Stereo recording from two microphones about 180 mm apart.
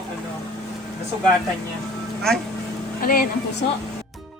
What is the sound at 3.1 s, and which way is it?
Speech, 50° left (ahead or behind).